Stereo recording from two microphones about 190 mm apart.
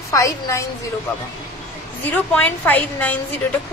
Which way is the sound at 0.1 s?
15° left (ahead or behind).